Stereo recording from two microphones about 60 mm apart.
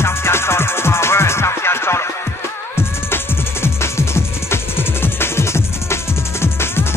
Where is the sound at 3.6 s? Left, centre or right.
Left.